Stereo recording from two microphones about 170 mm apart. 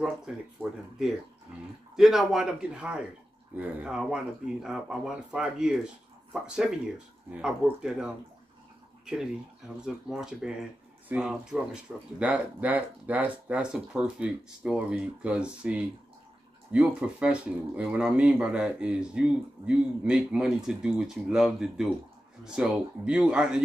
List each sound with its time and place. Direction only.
0.6 s speech: centre (ahead or behind)